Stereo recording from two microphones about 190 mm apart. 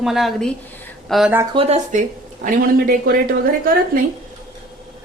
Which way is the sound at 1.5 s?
35° right (ahead or behind).